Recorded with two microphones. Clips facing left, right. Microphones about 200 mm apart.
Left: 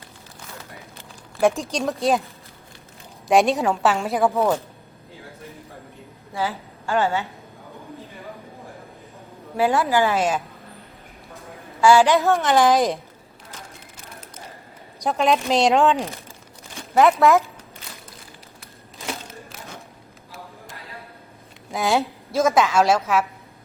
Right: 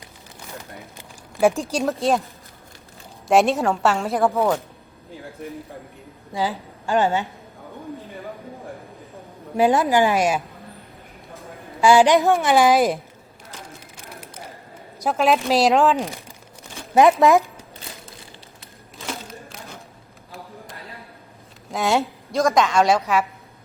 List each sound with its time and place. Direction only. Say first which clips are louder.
1.4 s a woman's voice: right 1 dB; centre (ahead or behind)
3.2 s a woman's voice: even; centre (ahead or behind)
6.3 s a woman's voice: right 2 dB; 15° right (ahead or behind)
9.6 s a woman's voice: right 2 dB; 15° right (ahead or behind)
11.8 s a woman's voice: right 1 dB; 15° right (ahead or behind)
13.9 s a sound: right 2 dB; 10° right (ahead or behind)
15.0 s a woman's voice: right 1 dB; centre (ahead or behind)
16.9 s a woman's voice: right 2 dB; 15° right (ahead or behind)
21.7 s a woman's voice: even; centre (ahead or behind)